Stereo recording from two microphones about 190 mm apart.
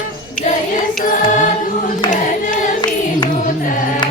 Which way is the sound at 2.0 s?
40° left (ahead or behind).